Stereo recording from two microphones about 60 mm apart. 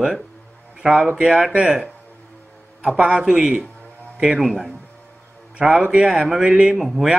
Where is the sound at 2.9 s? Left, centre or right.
Centre.